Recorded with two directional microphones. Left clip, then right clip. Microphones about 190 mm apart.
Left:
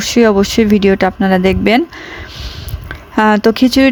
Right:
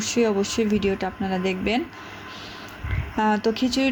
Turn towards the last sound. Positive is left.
turn(degrees=50)  # may be behind; listen again after turning